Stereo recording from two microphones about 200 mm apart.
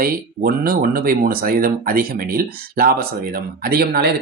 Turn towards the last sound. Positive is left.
turn(degrees=-50)  # may be behind; listen again after turning